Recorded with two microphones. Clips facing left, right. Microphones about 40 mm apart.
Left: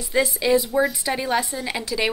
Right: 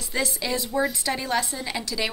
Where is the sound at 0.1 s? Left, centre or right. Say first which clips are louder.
Left 8 dB; centre.